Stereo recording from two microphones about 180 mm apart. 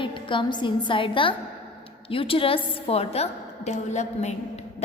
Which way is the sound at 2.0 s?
30° left (ahead or behind).